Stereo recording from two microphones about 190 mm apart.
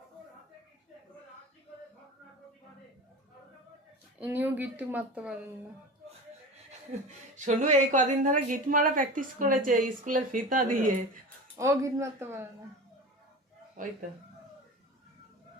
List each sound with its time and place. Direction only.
4.2 s speech: 10° right (ahead or behind)
7.3 s a woman's voice: 40° right (ahead or behind)
11.5 s speech: 15° right (ahead or behind)
13.8 s speech: 45° right (ahead or behind)